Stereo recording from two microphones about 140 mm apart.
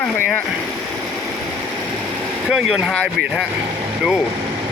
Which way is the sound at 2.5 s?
5° right (ahead or behind).